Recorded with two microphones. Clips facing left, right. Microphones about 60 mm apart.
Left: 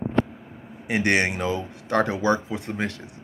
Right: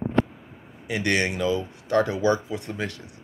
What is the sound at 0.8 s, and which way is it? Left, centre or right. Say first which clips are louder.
Speech: left 2 dB; left.